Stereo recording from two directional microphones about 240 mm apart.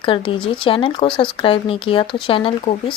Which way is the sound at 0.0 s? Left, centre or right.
Left.